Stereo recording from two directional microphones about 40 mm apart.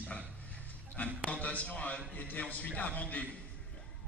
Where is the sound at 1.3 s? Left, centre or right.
Left.